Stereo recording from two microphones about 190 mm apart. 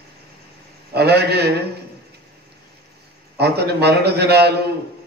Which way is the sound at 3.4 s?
55° right (ahead or behind).